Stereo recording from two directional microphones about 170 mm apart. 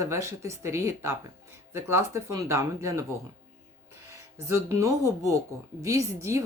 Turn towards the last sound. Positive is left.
turn(degrees=-15)  # may be behind; listen again after turning